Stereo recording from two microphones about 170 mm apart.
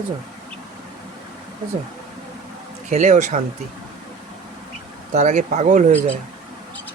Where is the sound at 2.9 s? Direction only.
45° right (ahead or behind).